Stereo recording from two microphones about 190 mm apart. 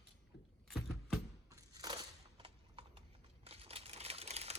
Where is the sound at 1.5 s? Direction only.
20° right (ahead or behind).